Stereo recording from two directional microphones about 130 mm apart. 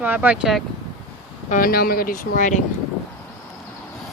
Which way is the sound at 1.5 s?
90° left.